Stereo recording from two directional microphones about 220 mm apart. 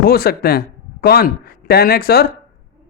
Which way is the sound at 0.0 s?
45° left (ahead or behind).